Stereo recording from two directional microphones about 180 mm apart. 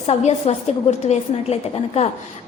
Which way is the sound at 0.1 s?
35° left (ahead or behind).